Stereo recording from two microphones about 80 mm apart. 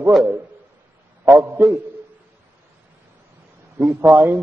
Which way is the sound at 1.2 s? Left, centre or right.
Right.